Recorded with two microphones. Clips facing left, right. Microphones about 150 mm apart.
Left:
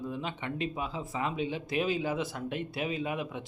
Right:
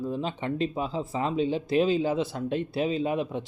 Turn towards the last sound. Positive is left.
turn(degrees=-30)  # may be behind; listen again after turning